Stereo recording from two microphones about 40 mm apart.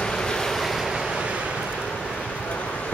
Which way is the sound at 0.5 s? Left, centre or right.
Centre.